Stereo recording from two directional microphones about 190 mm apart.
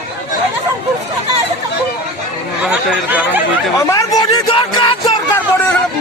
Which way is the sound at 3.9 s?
20° left (ahead or behind).